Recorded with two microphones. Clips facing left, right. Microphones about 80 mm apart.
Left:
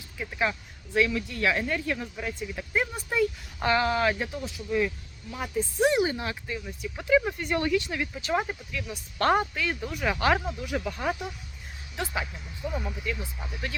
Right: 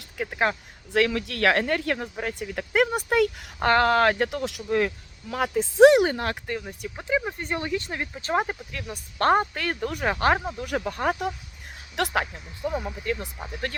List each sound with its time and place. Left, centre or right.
0.0 s speech: right
3.6 s speech: right
5.3 s speech: right
7.3 s speech: right
7.8 s speech: right
9.6 s speech: right
10.1 s speech: right
11.9 s speech: right
12.3 s speech: right
13.1 s speech: right